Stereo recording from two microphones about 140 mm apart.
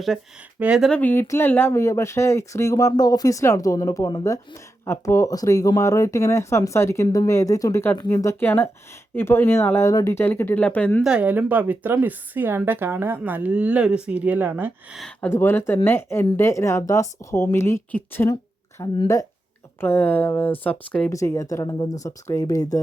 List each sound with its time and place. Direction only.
0.6 s speech: 5° right (ahead or behind)
0.9 s speech: 10° left (ahead or behind)
11.0 s speech: 10° right (ahead or behind)
14.9 s speech: 5° left (ahead or behind)
15.3 s speech: 15° left (ahead or behind)
21.1 s speech: 20° left (ahead or behind)